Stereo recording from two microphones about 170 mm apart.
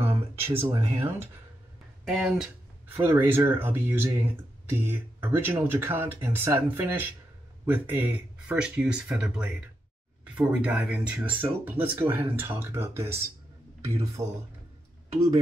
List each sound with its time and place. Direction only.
0.0 s a sound: 15° right (ahead or behind)
0.7 s speech: 20° right (ahead or behind)
2.0 s speech: 5° right (ahead or behind)